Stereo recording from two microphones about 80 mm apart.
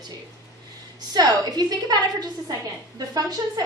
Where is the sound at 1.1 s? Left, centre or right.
Right.